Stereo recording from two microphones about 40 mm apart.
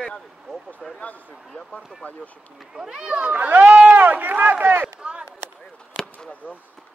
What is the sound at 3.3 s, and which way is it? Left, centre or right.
Speech, right.